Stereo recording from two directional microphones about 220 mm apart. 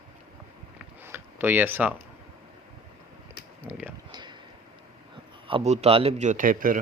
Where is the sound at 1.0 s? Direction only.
10° right (ahead or behind).